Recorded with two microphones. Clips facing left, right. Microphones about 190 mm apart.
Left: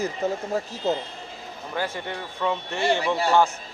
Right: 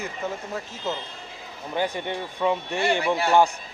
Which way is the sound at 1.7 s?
20° right (ahead or behind).